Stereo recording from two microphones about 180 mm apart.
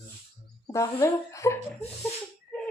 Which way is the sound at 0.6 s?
15° left (ahead or behind).